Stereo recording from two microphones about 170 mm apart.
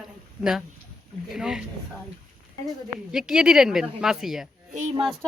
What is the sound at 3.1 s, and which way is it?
Speech, 5° right (ahead or behind).